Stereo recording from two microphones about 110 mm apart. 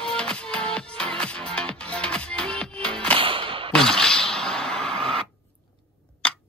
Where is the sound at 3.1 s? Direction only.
55° right (ahead or behind).